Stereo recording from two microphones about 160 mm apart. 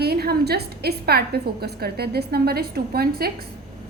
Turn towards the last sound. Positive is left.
turn(degrees=-75)  # may be behind; listen again after turning